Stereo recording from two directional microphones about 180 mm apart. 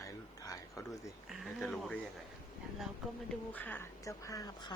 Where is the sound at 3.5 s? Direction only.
10° left (ahead or behind).